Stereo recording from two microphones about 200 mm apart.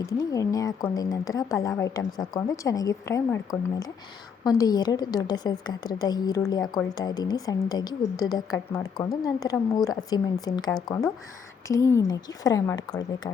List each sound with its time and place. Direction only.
0.0 s a woman's voice: 15° left (ahead or behind)